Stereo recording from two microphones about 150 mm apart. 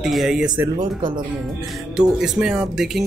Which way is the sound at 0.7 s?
30° right (ahead or behind).